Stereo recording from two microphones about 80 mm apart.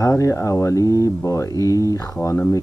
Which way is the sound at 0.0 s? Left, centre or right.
Left.